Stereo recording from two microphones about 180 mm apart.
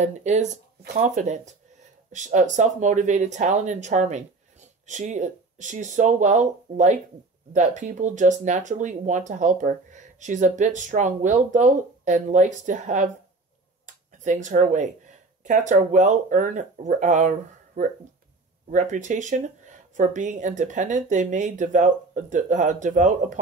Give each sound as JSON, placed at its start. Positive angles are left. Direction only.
{"t": 0.0, "sound": "speech", "side_deg": -40}
{"t": 14.2, "sound": "speech", "side_deg": -45}